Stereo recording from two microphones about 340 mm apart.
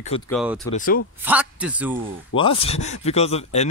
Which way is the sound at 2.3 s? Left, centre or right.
Centre.